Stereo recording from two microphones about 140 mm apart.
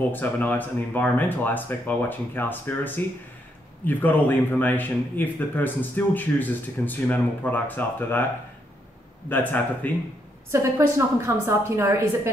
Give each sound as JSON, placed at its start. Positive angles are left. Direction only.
{"t": 0.1, "sound": "a man's voice", "side_deg": 15}
{"t": 9.3, "sound": "a man's voice", "side_deg": 15}
{"t": 10.5, "sound": "a woman's voice", "side_deg": -20}